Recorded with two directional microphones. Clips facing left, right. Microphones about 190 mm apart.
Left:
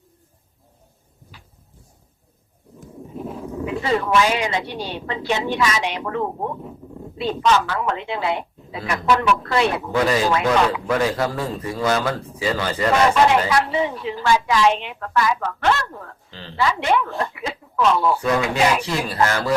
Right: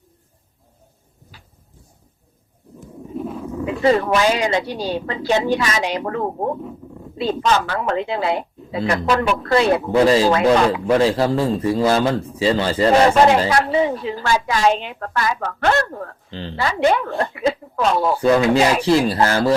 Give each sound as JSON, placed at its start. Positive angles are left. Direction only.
{"t": 4.1, "sound": "a woman's voice", "side_deg": -40}
{"t": 13.5, "sound": "a woman's voice", "side_deg": -40}
{"t": 16.3, "sound": "a woman's voice", "side_deg": -30}